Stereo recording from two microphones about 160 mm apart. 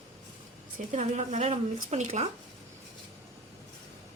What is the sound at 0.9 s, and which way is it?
A woman's voice, 50° right (ahead or behind).